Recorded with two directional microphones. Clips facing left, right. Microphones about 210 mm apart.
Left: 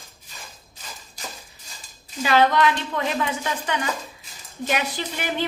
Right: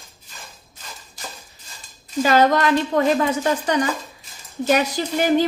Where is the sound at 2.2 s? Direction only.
45° right (ahead or behind).